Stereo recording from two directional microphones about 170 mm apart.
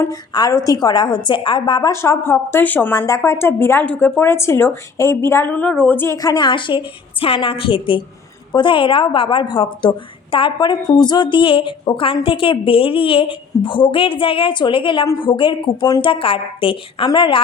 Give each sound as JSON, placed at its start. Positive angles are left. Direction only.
{"t": 0.0, "sound": "a woman's voice", "side_deg": 20}